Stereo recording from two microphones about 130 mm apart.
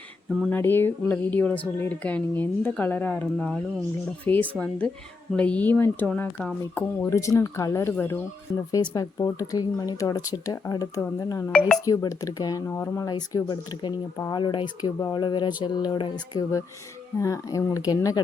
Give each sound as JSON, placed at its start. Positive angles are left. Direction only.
{"t": 0.3, "sound": "speech", "side_deg": 0}
{"t": 0.5, "sound": "speech", "side_deg": 15}
{"t": 3.3, "sound": "speech", "side_deg": 0}
{"t": 4.3, "sound": "speech", "side_deg": 10}